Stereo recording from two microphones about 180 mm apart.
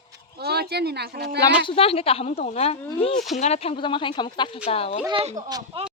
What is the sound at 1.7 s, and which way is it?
Speech, 35° left (ahead or behind).